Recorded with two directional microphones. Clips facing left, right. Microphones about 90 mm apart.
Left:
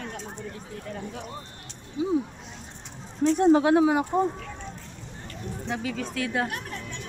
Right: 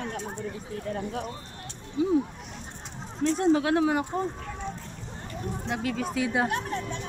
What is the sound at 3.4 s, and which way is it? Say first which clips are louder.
Speech: left 4 dB; 25° left (ahead or behind).